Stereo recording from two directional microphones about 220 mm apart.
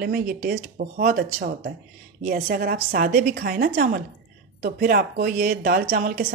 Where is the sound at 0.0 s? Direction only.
40° right (ahead or behind).